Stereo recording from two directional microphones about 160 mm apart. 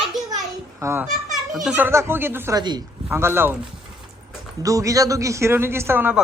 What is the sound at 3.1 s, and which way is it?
Speech, 15° right (ahead or behind).